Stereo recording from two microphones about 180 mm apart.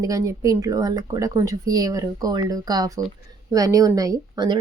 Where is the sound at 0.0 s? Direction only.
20° right (ahead or behind).